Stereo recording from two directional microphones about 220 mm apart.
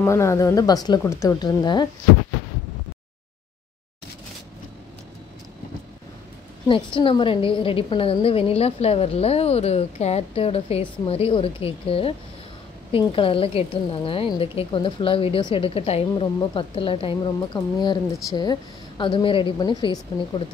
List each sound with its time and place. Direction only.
0.0 s a woman's voice: 15° left (ahead or behind)
6.7 s a woman's voice: 25° left (ahead or behind)